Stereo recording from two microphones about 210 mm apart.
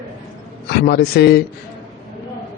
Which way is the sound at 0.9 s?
50° left (ahead or behind).